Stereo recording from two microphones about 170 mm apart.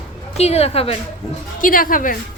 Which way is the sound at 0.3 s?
40° left (ahead or behind).